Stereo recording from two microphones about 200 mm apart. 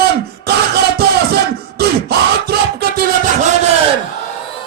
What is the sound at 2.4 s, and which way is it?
Music, 50° right (ahead or behind).